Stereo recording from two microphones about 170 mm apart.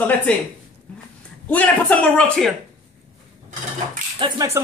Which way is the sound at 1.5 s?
10° left (ahead or behind).